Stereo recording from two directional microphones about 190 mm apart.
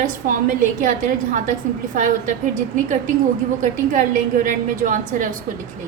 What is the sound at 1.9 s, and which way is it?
Speech, 45° right (ahead or behind).